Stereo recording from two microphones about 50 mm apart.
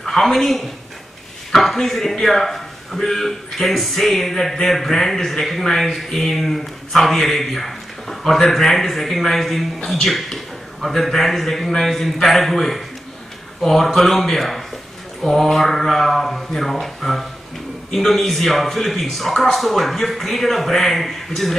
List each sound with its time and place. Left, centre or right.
0.0 s a woman's voice: centre
13.9 s speech: centre